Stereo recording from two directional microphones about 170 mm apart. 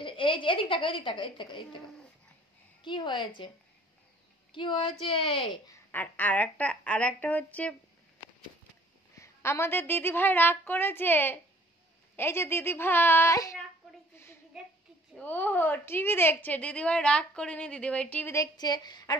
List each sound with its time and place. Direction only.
0.0 s a woman's voice: 30° left (ahead or behind)
2.8 s a woman's voice: 25° left (ahead or behind)
4.5 s a woman's voice: 30° left (ahead or behind)
5.9 s a woman's voice: 10° left (ahead or behind)
9.1 s a woman's voice: 15° left (ahead or behind)
14.5 s a sound: centre (ahead or behind)
15.1 s a woman's voice: 10° left (ahead or behind)